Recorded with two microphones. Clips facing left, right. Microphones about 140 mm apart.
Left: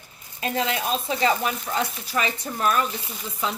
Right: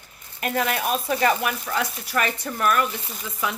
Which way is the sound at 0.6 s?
20° left (ahead or behind).